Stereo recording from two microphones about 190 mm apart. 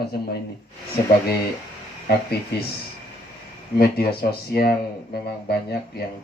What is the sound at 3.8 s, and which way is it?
Speech, 55° left (ahead or behind).